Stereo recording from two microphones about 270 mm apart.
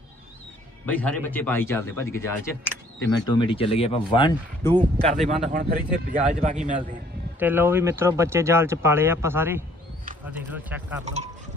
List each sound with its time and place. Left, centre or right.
0.9 s speech: centre
4.9 s speech: centre
5.2 s speech: right
7.3 s speech: centre
11.0 s speech: right